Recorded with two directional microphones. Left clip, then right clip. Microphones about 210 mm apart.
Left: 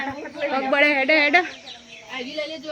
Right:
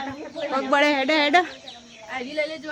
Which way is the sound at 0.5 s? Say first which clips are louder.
Left 1 dB; 10° right (ahead or behind).